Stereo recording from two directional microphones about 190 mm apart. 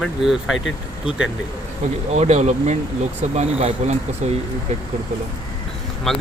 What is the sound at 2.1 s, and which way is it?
Speech, 35° right (ahead or behind).